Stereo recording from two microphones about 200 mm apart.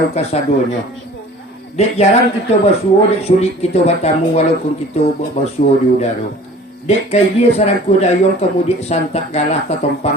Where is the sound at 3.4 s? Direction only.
30° left (ahead or behind).